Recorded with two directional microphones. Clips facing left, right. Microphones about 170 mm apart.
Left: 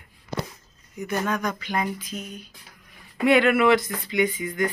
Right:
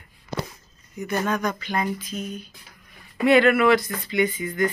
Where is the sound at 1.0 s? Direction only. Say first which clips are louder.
Right 1 dB; 10° left (ahead or behind).